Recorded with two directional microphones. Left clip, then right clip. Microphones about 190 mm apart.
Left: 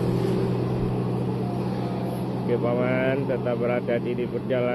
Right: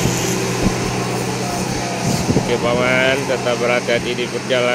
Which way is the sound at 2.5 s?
10° right (ahead or behind).